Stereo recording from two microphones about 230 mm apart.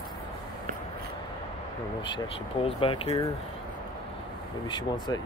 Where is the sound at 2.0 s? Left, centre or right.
Left.